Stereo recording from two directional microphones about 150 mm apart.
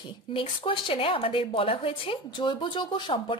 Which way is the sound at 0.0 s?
35° left (ahead or behind).